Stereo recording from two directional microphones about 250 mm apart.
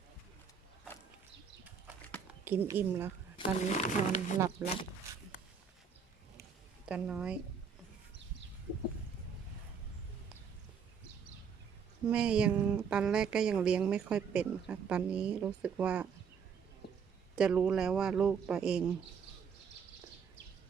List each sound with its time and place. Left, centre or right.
2.4 s speech: centre
3.3 s speech: left
4.6 s speech: centre
6.8 s speech: centre
12.0 s speech: centre
17.3 s speech: centre